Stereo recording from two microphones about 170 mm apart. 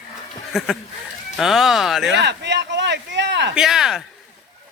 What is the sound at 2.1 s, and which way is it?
Speech, 90° right.